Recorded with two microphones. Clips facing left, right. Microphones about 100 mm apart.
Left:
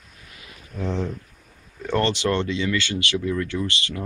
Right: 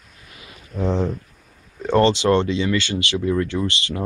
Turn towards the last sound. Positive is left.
turn(degrees=-25)  # may be behind; listen again after turning